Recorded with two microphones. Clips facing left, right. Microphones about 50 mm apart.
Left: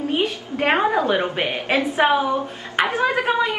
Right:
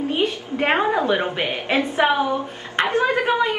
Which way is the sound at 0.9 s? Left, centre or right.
Left.